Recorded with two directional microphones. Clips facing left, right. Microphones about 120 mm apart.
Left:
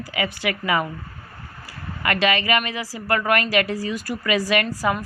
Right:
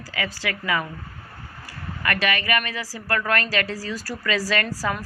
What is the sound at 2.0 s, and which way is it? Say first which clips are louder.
A woman's voice: left 4 dB; 20° left (ahead or behind).